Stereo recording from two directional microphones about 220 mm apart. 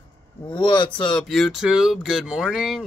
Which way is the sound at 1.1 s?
Centre (ahead or behind).